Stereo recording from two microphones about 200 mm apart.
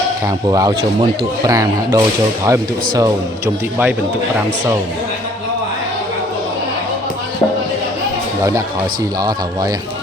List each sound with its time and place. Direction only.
0.5 s speech: 20° right (ahead or behind)